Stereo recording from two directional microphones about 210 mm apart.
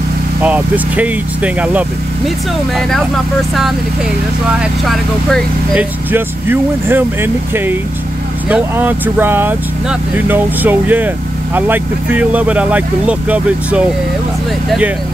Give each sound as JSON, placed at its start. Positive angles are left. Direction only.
{"t": 0.4, "sound": "speech", "side_deg": -5}
{"t": 4.6, "sound": "speech", "side_deg": 0}